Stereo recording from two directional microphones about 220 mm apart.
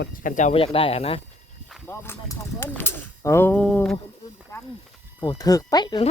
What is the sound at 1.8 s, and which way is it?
Speech, 10° left (ahead or behind).